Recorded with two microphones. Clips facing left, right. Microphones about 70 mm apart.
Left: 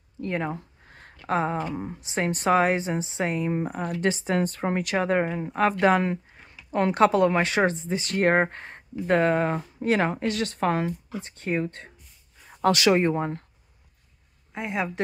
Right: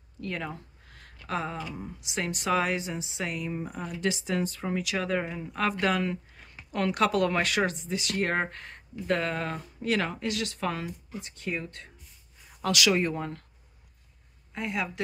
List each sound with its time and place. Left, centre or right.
0.2 s speech: left
4.1 s speech: left
14.5 s a woman's voice: left